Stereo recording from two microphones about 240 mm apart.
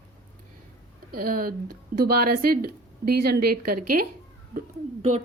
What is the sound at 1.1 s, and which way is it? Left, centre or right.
A woman's voice, right.